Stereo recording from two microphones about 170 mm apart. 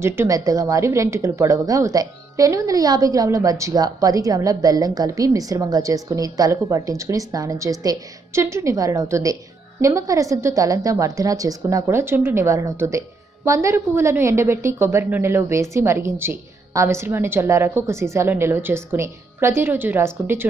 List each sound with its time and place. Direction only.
0.0 s a woman's voice: 15° right (ahead or behind)